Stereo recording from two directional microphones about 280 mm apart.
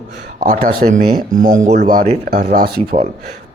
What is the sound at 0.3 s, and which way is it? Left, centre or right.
Speech, right.